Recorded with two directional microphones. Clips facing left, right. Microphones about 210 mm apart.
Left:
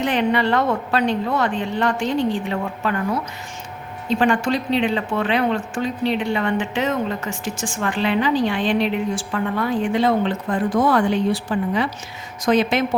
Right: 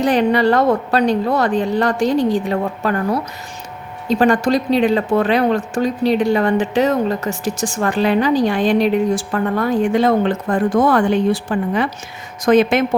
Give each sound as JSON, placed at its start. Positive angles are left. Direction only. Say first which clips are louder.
{"t": 0.0, "sound": "speech", "louder": "right 5 dB", "side_deg": -40}